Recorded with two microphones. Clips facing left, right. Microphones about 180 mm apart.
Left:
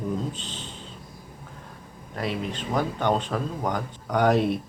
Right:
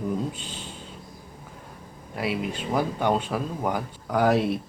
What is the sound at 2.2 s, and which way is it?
Speech, 10° right (ahead or behind).